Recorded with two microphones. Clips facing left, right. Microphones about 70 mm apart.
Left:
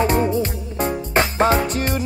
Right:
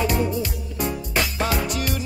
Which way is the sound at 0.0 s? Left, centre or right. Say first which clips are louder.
Left 5 dB; left.